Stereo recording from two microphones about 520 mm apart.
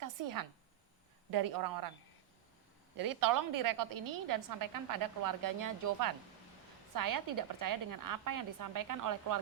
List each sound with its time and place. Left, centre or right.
0.0 s a sound: right
1.3 s a woman's voice: right
3.0 s a woman's voice: right